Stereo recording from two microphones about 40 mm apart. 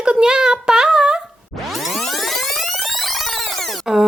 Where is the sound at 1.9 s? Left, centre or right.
Centre.